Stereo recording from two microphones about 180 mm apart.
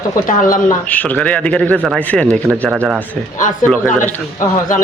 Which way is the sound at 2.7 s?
10° right (ahead or behind).